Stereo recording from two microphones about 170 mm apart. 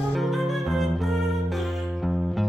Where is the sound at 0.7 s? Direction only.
Centre (ahead or behind).